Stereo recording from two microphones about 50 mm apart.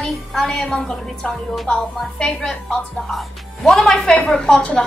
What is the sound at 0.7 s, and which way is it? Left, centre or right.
A woman's voice, centre.